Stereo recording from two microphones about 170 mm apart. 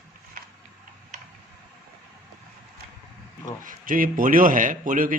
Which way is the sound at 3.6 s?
55° right (ahead or behind).